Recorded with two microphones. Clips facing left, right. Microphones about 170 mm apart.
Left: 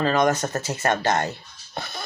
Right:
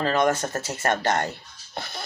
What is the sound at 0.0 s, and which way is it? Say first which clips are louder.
Speech: left 2 dB; 25° left (ahead or behind).